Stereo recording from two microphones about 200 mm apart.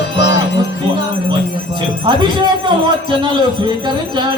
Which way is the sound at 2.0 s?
25° right (ahead or behind).